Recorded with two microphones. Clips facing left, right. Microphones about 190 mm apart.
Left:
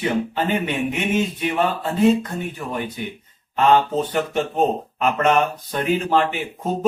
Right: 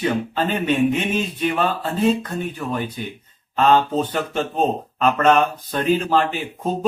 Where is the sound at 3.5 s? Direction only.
10° left (ahead or behind).